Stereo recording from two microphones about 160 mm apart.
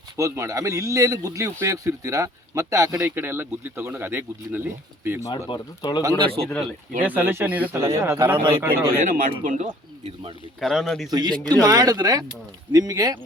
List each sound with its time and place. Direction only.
0.2 s a man's voice: 20° right (ahead or behind)
5.5 s speech: 25° left (ahead or behind)
6.0 s speech: 25° right (ahead or behind)
7.0 s speech: 10° right (ahead or behind)
9.0 s speech: 60° right (ahead or behind); by 10.3 s 40° right (ahead or behind)
10.6 s speech: centre (ahead or behind)
11.1 s a man's voice: 25° right (ahead or behind)